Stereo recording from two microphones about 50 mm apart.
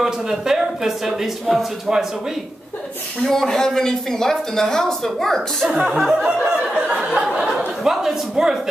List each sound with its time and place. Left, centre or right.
0.0 s speech: centre
3.2 s speech: centre
5.7 s speech: right
5.9 s snicker: centre
6.2 s speech: centre
7.0 s speech: centre